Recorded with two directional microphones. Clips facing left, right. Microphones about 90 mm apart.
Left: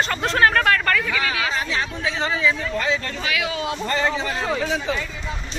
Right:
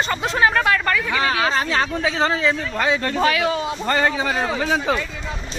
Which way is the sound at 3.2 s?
40° right (ahead or behind).